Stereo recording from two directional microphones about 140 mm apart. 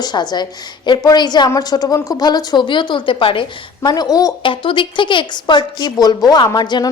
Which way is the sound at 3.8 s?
30° left (ahead or behind).